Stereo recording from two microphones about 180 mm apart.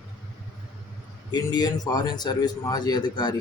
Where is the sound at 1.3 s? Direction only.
25° left (ahead or behind).